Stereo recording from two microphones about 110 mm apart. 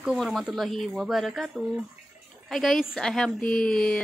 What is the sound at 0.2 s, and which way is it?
Speech, centre (ahead or behind).